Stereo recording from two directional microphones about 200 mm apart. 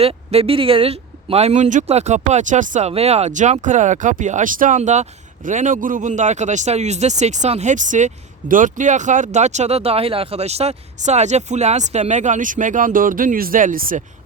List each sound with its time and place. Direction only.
0.0 s speech: 30° right (ahead or behind)